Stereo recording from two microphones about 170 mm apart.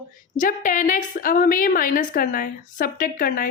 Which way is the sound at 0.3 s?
50° left (ahead or behind).